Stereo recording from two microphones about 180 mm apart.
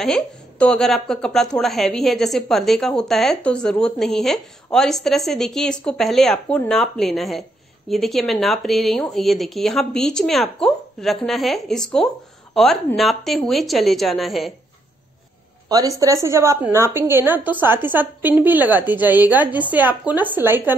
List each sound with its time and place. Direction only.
0.0 s speech: 5° left (ahead or behind)
15.7 s a woman's voice: 20° right (ahead or behind)